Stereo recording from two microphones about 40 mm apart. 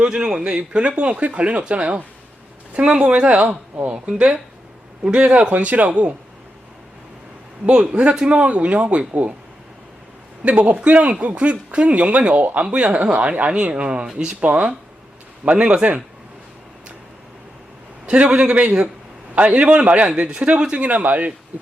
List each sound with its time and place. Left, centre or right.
0.0 s speech: right
5.0 s speech: right
7.7 s speech: right
10.6 s speech: right
14.4 s speech: right
18.0 s speech: right
20.6 s speech: right
20.8 s speech: right